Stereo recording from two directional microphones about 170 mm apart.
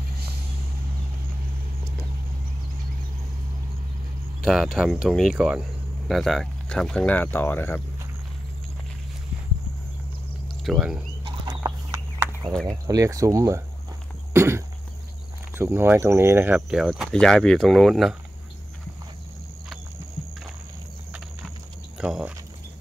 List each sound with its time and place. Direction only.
4.5 s speech: centre (ahead or behind)
10.6 s speech: centre (ahead or behind)
11.2 s a sound: 25° right (ahead or behind)
12.6 s speech: 20° right (ahead or behind)
14.3 s a sound: 15° right (ahead or behind)
15.5 s speech: 15° right (ahead or behind)
21.9 s speech: 5° right (ahead or behind)